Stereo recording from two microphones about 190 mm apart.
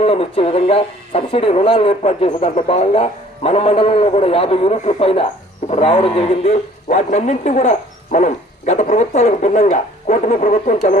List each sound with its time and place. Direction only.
0.0 s speech: 30° left (ahead or behind)